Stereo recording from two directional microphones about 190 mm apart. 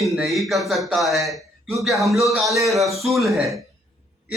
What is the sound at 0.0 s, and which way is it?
Speech, centre (ahead or behind).